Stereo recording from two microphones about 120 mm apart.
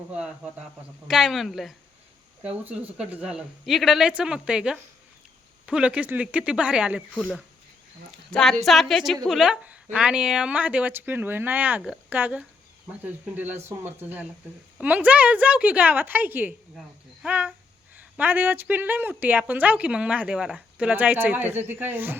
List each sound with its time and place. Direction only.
0.1 s a woman's voice: 10° right (ahead or behind)
8.3 s a woman's voice: 5° left (ahead or behind); by 22.2 s 15° right (ahead or behind)